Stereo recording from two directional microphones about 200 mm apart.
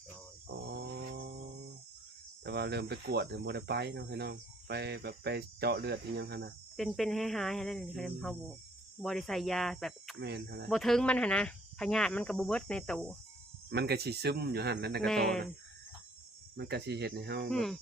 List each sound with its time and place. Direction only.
0.7 s a sound: 55° right (ahead or behind)
2.4 s speech: 55° right (ahead or behind)
6.7 s speech: centre (ahead or behind)
10.2 s speech: 55° right (ahead or behind)
10.7 s speech: centre (ahead or behind)
13.7 s speech: 55° right (ahead or behind)
15.0 s speech: centre (ahead or behind)
16.6 s speech: 55° right (ahead or behind)
17.5 s speech: centre (ahead or behind)